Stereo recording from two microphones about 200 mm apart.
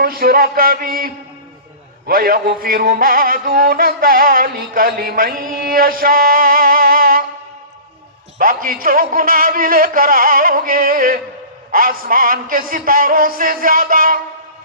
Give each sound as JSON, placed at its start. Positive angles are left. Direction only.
{"t": 0.0, "sound": "music", "side_deg": -50}
{"t": 8.4, "sound": "music", "side_deg": -45}